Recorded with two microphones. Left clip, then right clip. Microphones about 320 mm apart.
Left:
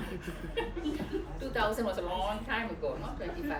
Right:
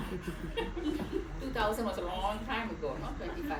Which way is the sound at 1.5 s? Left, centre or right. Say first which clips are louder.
Left 1 dB; centre.